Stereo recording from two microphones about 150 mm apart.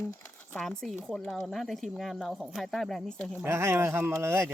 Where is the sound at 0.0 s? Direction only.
15° left (ahead or behind).